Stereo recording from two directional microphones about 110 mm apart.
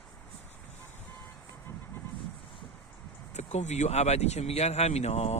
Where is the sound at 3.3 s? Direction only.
90° left.